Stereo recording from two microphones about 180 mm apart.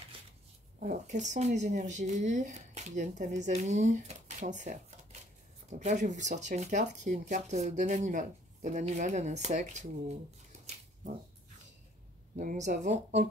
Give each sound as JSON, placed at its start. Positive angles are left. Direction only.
{"t": 0.7, "sound": "speech", "side_deg": -45}
{"t": 12.4, "sound": "speech", "side_deg": -45}